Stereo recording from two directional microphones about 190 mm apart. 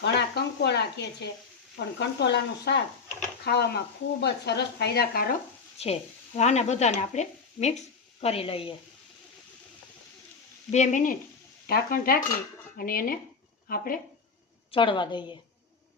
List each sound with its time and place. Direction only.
0.0 s speech: 65° left (ahead or behind)
5.7 s speech: 35° left (ahead or behind)
10.7 s speech: 40° left (ahead or behind)
14.7 s a woman's voice: 25° left (ahead or behind)